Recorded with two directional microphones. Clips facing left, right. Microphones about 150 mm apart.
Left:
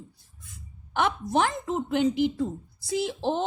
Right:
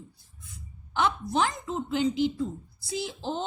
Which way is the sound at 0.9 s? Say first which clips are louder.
Left 2 dB; 55° left (ahead or behind).